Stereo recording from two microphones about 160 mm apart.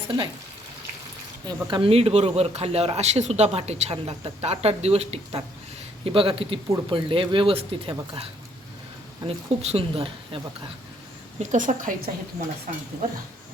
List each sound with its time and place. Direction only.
1.5 s speech: 30° right (ahead or behind)
11.3 s a woman's voice: 55° right (ahead or behind)